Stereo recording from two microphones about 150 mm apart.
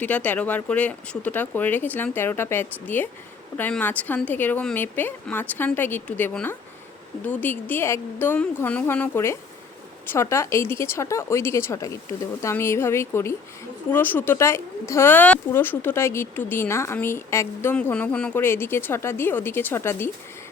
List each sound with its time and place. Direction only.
0.0 s speech: 10° left (ahead or behind)